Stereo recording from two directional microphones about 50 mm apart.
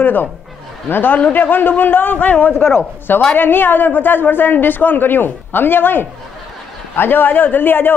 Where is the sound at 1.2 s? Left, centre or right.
Left.